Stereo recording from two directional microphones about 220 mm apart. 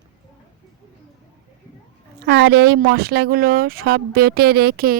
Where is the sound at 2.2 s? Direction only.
50° right (ahead or behind).